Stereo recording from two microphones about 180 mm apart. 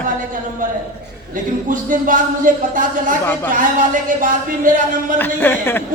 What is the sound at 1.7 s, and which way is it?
Speech, 45° right (ahead or behind).